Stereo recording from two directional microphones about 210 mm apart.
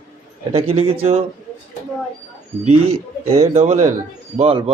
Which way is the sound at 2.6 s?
30° right (ahead or behind).